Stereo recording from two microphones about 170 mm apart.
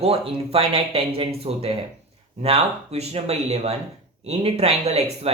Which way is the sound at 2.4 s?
35° right (ahead or behind).